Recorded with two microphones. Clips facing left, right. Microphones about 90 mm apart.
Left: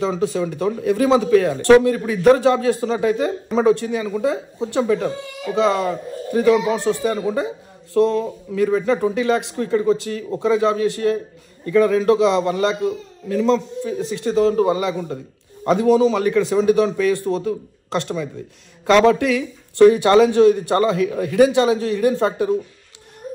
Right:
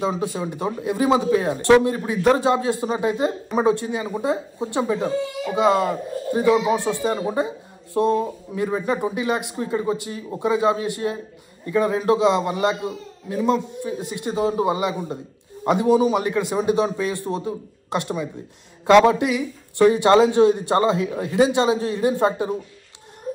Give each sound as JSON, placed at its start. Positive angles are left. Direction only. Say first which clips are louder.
{"t": 0.0, "sound": "speech", "louder": "left 4 dB", "side_deg": -20}